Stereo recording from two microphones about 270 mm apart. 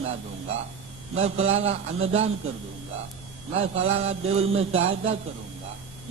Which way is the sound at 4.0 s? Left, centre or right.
Right.